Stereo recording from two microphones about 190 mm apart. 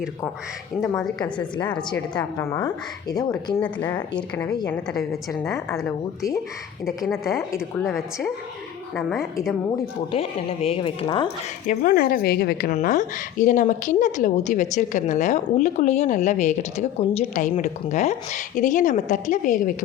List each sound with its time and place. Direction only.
0.8 s a woman's voice: centre (ahead or behind)
2.1 s a woman's voice: 20° left (ahead or behind)
3.6 s a woman's voice: 10° left (ahead or behind)
4.9 s a woman's voice: centre (ahead or behind)
6.8 s a woman's voice: centre (ahead or behind)
9.3 s a woman's voice: centre (ahead or behind)
10.1 s a woman's voice: 30° left (ahead or behind)
11.7 s a woman's voice: 45° left (ahead or behind)
12.8 s a woman's voice: 40° left (ahead or behind)